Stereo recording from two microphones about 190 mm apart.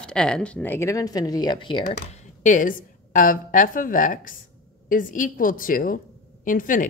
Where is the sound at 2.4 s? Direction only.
45° left (ahead or behind).